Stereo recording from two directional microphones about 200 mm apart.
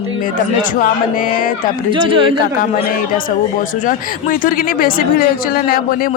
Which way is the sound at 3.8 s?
45° left (ahead or behind).